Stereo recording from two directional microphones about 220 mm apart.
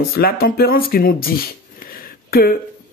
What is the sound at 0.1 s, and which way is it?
Speech, 45° left (ahead or behind).